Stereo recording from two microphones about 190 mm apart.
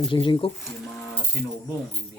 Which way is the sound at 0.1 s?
25° left (ahead or behind).